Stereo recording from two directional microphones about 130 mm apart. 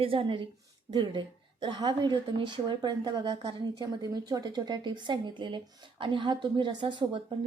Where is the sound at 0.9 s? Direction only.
30° right (ahead or behind).